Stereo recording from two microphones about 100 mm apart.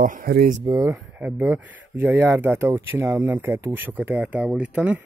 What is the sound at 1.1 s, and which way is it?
Speech, 15° right (ahead or behind).